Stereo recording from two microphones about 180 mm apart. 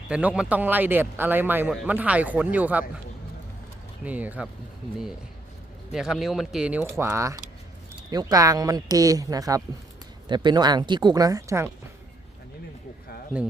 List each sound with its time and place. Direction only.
0.1 s speech: 5° right (ahead or behind)
4.0 s speech: 10° right (ahead or behind)
5.9 s speech: 5° right (ahead or behind)
13.3 s speech: 5° right (ahead or behind)